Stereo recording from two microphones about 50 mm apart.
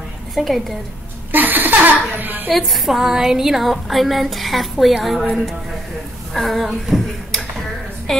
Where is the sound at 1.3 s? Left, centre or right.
Right.